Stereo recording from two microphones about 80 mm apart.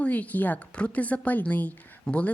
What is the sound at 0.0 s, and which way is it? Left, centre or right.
Speech, centre.